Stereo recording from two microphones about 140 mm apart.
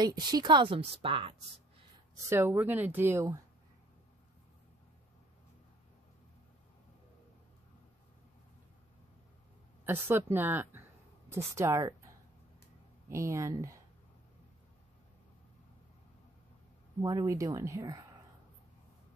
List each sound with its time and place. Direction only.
0.0 s a woman's voice: 30° right (ahead or behind)
2.2 s speech: 15° right (ahead or behind)
9.8 s speech: 15° right (ahead or behind)
13.1 s speech: 20° right (ahead or behind)
17.0 s speech: 25° right (ahead or behind)